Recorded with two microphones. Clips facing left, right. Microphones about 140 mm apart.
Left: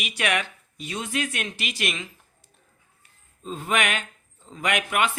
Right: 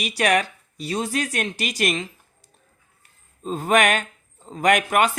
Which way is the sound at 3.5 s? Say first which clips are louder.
Right 7 dB; 45° right (ahead or behind).